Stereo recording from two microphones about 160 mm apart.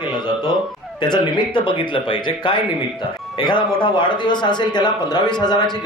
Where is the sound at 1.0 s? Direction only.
30° left (ahead or behind).